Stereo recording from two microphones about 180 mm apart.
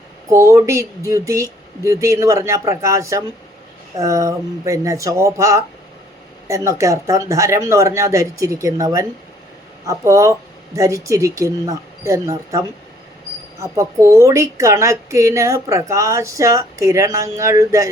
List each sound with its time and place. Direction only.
0.3 s a woman's voice: 15° right (ahead or behind)